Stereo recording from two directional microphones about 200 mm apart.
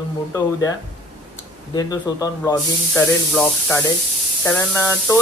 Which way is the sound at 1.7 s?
20° left (ahead or behind).